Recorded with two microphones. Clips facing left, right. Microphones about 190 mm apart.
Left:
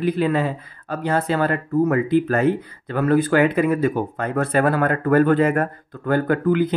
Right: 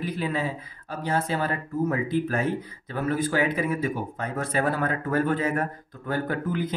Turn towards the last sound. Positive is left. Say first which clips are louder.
# left 9 dB
turn(degrees=65)  # may be behind; listen again after turning